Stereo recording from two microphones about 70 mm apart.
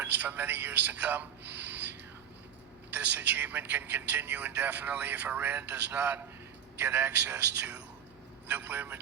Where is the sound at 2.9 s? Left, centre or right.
Right.